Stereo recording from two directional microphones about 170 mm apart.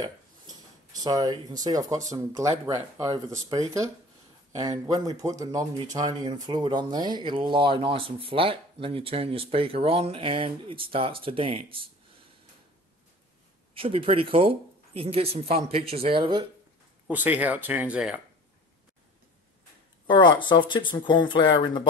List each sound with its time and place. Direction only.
1.0 s speech: 20° right (ahead or behind)
13.7 s speech: 30° right (ahead or behind)
17.1 s speech: 10° right (ahead or behind)
20.1 s speech: 25° left (ahead or behind)